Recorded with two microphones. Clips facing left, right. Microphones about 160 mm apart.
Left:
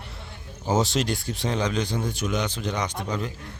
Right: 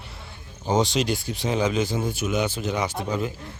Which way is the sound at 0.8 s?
Centre (ahead or behind).